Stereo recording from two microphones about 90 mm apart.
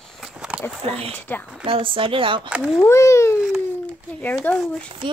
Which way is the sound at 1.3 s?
20° left (ahead or behind).